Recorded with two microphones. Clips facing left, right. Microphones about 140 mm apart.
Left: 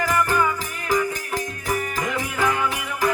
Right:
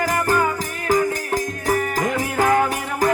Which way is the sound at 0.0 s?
40° right (ahead or behind).